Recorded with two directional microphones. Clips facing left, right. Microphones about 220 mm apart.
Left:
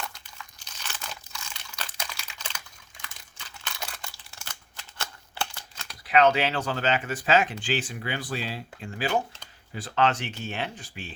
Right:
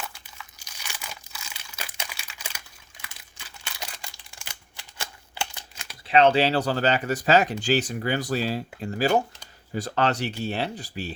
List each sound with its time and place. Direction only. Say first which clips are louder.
0.0 s crumpling: even; 10° right (ahead or behind)
3.0 s a sound: left 1 dB; 10° right (ahead or behind)
6.1 s speech: right 3 dB; 30° right (ahead or behind)